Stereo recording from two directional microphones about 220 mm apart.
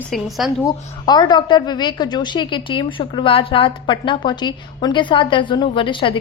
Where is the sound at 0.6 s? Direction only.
20° left (ahead or behind).